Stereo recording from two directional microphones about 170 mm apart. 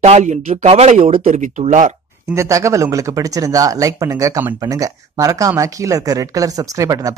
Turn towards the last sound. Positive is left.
turn(degrees=-20)  # may be behind; listen again after turning